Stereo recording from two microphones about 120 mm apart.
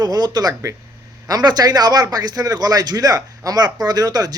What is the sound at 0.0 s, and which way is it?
Speech, 35° right (ahead or behind).